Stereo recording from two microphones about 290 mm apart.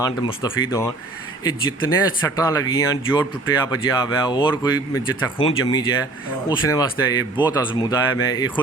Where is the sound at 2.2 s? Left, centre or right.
Centre.